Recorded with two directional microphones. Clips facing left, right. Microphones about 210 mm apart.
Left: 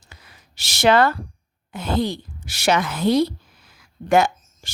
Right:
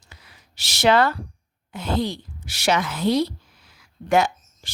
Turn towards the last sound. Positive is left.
turn(degrees=50)  # may be behind; listen again after turning